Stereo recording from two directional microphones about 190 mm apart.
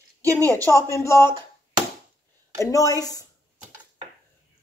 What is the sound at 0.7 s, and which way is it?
Speech, 15° left (ahead or behind).